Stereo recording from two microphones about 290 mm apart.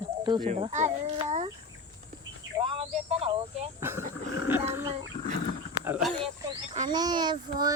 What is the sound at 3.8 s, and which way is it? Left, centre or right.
Speech, centre.